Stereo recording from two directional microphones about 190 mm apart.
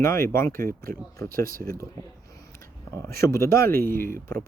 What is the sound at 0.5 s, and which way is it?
Speech, 50° right (ahead or behind).